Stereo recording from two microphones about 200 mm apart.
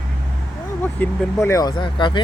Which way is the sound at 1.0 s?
15° left (ahead or behind).